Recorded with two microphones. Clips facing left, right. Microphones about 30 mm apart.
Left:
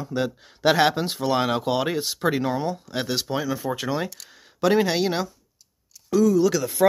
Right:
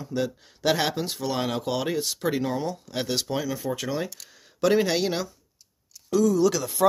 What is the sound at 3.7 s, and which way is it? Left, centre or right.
Speech, left.